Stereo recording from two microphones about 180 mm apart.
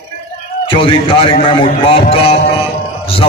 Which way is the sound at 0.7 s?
30° left (ahead or behind).